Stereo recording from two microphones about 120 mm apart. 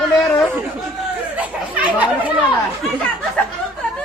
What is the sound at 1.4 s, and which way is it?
Chatter, 10° right (ahead or behind).